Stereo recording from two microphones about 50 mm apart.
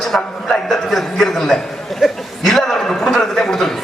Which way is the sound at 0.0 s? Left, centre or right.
Centre.